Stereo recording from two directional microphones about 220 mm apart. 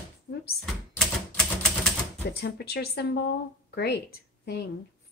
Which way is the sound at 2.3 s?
50° left (ahead or behind).